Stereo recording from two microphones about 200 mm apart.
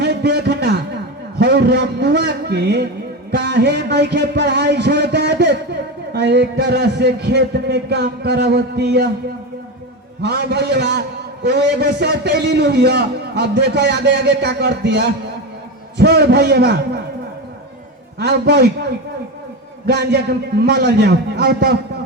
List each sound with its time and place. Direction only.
0.0 s a sound: 55° right (ahead or behind)
3.3 s a man's voice: 55° right (ahead or behind)
10.2 s a man's voice: 55° right (ahead or behind)
18.2 s a man's voice: 55° right (ahead or behind)
19.9 s a man's voice: 55° right (ahead or behind)